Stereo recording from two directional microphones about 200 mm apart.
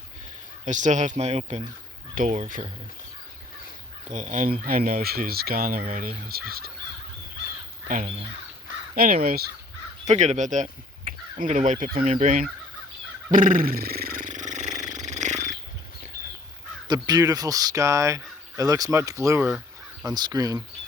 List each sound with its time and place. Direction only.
0.6 s speech: 40° right (ahead or behind)
4.1 s speech: 40° right (ahead or behind)
7.9 s speech: 40° right (ahead or behind)
10.1 s speech: 35° right (ahead or behind)
13.3 s a sound: 45° right (ahead or behind)
14.9 s purr: 35° right (ahead or behind)
16.9 s speech: 20° right (ahead or behind)
19.5 s crow: 5° right (ahead or behind)
20.1 s speech: 20° right (ahead or behind)